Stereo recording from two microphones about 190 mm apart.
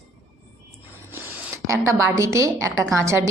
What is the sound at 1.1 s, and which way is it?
A woman's voice, 10° right (ahead or behind).